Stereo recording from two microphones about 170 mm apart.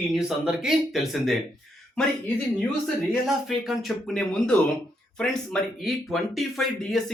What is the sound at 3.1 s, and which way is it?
Speech, centre (ahead or behind).